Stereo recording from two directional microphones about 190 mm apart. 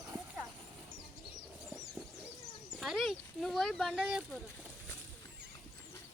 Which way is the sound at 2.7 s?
Centre (ahead or behind).